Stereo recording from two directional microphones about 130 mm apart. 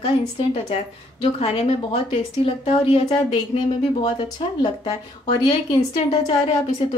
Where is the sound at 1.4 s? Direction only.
50° left (ahead or behind).